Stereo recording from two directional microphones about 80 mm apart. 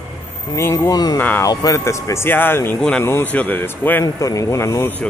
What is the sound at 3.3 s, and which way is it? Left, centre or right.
Speech, left.